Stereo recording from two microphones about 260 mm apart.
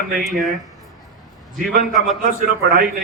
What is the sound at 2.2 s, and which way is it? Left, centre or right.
Speech, right.